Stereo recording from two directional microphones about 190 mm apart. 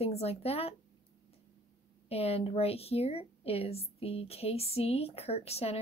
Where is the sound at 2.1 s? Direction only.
30° left (ahead or behind).